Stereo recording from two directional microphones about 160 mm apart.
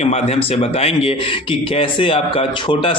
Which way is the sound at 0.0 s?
40° left (ahead or behind).